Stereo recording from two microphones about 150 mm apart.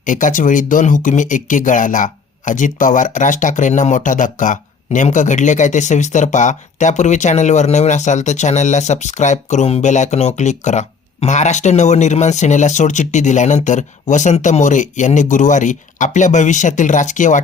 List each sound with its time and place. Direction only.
0.0 s speech: 60° left (ahead or behind)